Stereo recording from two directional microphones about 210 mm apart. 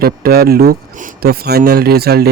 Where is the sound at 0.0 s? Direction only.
45° right (ahead or behind).